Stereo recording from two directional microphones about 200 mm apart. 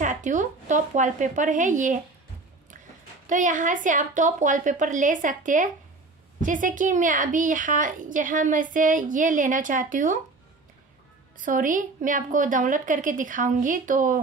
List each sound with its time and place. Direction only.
0.0 s a woman's voice: 40° right (ahead or behind)
3.3 s a woman's voice: 40° right (ahead or behind)
11.3 s a woman's voice: 40° right (ahead or behind)